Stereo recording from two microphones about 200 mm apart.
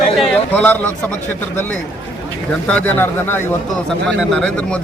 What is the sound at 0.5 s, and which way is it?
A man's voice, 10° left (ahead or behind).